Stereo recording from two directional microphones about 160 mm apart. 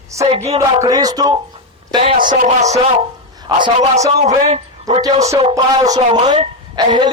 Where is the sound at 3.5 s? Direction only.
25° right (ahead or behind).